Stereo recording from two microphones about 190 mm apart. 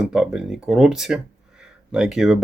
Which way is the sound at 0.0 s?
5° right (ahead or behind).